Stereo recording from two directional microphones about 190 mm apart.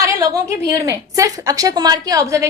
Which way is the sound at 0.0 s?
15° right (ahead or behind).